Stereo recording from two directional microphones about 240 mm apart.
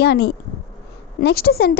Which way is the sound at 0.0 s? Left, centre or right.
Left.